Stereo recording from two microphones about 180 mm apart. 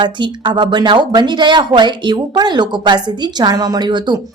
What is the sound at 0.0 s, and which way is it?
Speech, 25° right (ahead or behind).